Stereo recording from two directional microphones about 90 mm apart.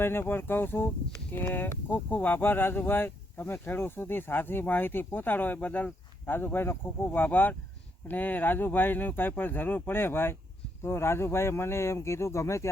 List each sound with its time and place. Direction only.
0.0 s speech: 25° left (ahead or behind)